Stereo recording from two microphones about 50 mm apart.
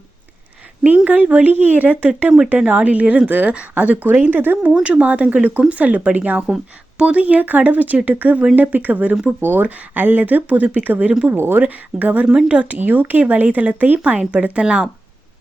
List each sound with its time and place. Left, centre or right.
1.0 s speech: right
4.7 s speech: right
11.3 s speech: right
11.6 s speech: right
14.6 s speech: centre